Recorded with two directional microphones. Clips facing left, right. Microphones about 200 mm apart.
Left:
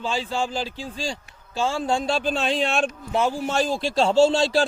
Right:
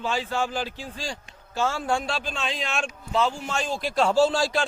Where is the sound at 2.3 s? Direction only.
35° left (ahead or behind).